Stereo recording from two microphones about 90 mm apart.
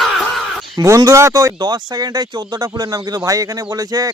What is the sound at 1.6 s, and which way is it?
Speech, 50° right (ahead or behind).